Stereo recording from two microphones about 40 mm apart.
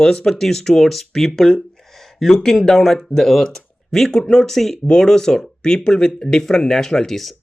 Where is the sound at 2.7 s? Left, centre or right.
Centre.